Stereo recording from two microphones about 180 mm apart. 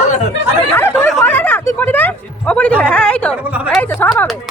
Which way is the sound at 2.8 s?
5° left (ahead or behind).